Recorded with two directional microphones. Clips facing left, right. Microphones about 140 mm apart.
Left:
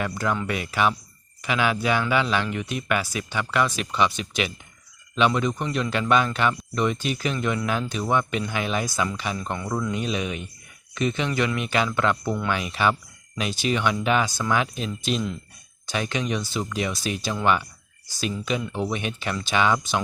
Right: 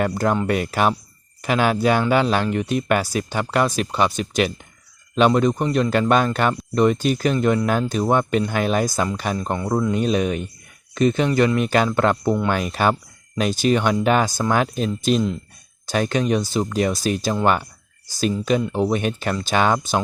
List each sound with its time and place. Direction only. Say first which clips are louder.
0.0 s speech: right 6 dB; 40° right (ahead or behind)
15.9 s speech: right 7 dB; 40° right (ahead or behind)